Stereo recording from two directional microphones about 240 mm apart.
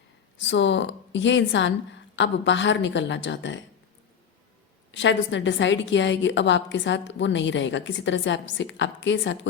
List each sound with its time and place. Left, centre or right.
0.3 s a woman's voice: left
4.9 s a woman's voice: left